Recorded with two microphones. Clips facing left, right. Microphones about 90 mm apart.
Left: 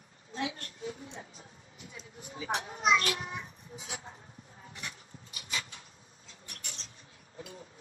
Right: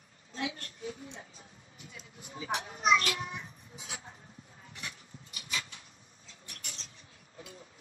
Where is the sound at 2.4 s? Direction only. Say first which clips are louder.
Even; 35° left (ahead or behind).